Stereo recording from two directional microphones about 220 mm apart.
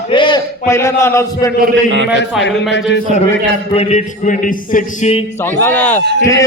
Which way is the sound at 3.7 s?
30° left (ahead or behind).